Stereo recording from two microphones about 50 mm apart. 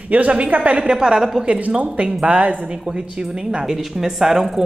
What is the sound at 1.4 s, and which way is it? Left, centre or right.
A man's voice, right.